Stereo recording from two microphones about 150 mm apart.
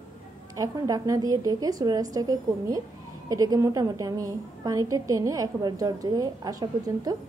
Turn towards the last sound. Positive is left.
turn(degrees=-25)  # may be behind; listen again after turning